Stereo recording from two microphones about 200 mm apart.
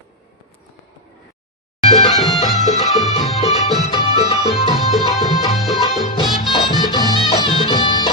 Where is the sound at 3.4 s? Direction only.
30° left (ahead or behind).